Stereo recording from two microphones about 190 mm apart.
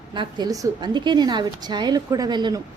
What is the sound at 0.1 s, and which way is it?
A woman's voice, 25° right (ahead or behind).